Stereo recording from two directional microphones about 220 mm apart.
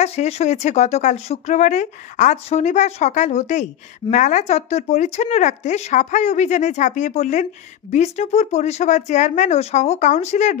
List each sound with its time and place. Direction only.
0.0 s speech: 30° left (ahead or behind)